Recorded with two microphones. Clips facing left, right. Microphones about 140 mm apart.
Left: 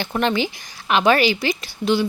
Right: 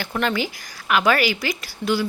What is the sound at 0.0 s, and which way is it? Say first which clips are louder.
Speech: left 3 dB; 25° left (ahead or behind).